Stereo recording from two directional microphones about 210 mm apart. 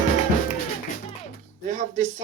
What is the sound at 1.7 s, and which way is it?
Speech, 35° right (ahead or behind).